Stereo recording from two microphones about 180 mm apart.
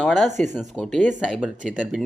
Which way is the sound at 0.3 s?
40° right (ahead or behind).